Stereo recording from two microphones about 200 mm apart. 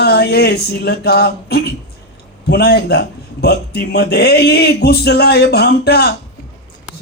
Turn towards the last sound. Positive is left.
turn(degrees=55)  # may be behind; listen again after turning